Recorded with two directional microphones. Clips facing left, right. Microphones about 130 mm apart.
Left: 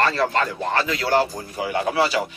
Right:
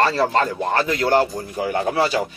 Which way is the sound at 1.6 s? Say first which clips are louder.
Right 1 dB; 40° right (ahead or behind).